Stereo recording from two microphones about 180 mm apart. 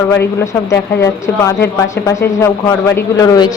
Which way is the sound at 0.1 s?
15° left (ahead or behind).